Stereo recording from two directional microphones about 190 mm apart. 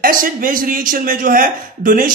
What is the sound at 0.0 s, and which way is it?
A man's voice, 45° right (ahead or behind).